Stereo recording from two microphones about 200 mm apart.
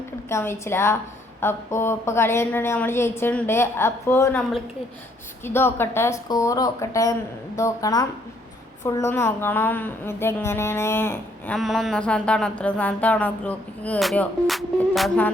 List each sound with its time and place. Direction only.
0.3 s a woman's voice: 15° left (ahead or behind)